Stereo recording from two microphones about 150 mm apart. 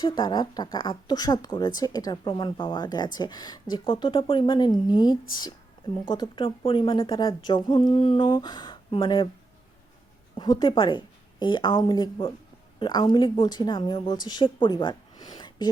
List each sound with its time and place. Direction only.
0.0 s speech: 30° left (ahead or behind)
10.3 s a woman's voice: 30° left (ahead or behind)